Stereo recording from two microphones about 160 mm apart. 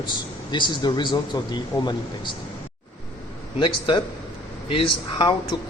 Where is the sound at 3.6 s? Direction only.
30° left (ahead or behind).